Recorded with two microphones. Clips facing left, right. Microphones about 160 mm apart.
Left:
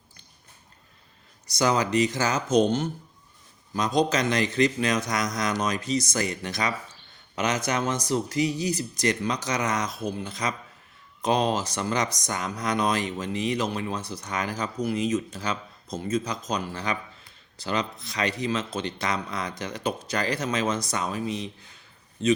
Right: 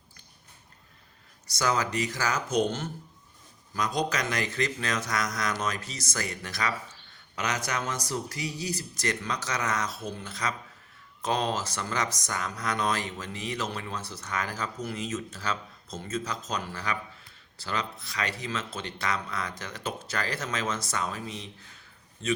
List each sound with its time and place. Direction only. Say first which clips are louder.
1.5 s speech: left 4 dB; 20° left (ahead or behind)